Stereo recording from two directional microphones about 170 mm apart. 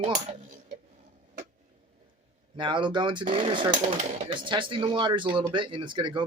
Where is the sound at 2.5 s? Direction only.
30° right (ahead or behind).